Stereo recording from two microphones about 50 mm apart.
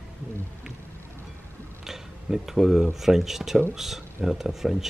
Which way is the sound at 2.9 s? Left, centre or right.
Centre.